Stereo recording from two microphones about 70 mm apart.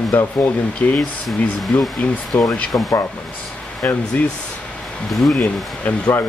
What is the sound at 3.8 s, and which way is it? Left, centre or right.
Speech, left.